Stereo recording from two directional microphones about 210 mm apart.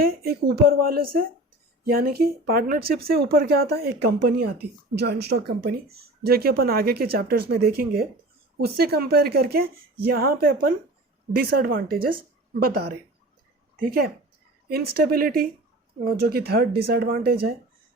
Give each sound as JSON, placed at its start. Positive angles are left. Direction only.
{"t": 0.0, "sound": "speech", "side_deg": -45}